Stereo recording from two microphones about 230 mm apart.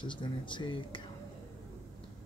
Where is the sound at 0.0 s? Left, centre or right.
Left.